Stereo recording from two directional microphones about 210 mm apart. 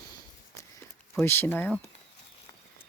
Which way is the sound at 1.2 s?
10° left (ahead or behind).